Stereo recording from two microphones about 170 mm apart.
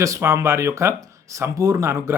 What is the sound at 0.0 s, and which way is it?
Speech, 15° right (ahead or behind).